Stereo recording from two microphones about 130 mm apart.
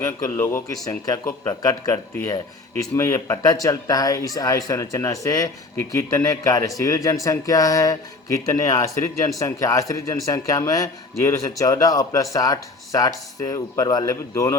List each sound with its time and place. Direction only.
0.0 s speech: 20° left (ahead or behind)